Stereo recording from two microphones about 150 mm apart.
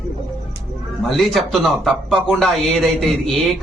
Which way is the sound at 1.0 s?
Centre (ahead or behind).